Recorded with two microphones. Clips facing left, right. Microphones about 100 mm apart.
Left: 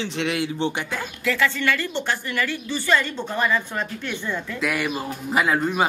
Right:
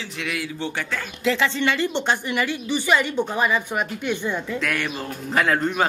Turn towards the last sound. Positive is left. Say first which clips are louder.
# even
turn(degrees=5)  # may be behind; listen again after turning